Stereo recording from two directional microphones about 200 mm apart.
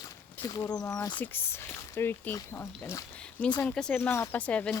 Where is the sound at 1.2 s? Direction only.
10° left (ahead or behind).